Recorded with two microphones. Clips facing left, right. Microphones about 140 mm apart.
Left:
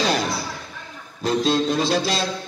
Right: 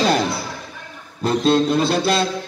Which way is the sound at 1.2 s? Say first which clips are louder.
Right 3 dB; 55° right (ahead or behind).